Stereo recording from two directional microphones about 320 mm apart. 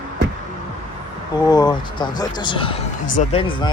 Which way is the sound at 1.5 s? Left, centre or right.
Centre.